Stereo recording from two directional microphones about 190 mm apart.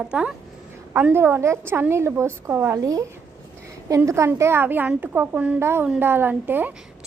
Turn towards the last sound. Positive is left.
turn(degrees=-10)  # may be behind; listen again after turning